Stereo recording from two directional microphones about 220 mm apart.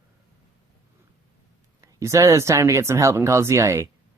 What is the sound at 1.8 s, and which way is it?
Speech, 15° right (ahead or behind).